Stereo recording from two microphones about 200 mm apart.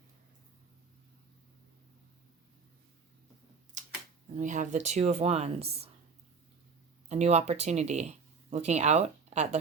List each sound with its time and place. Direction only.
3.8 s a sound: 40° right (ahead or behind)
4.4 s speech: 40° right (ahead or behind)
7.1 s speech: 35° right (ahead or behind)